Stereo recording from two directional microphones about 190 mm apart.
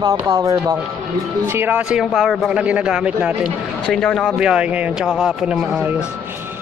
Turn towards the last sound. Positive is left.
turn(degrees=-5)  # may be behind; listen again after turning